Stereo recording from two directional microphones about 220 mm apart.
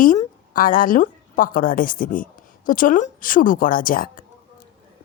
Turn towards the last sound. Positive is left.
turn(degrees=40)  # may be behind; listen again after turning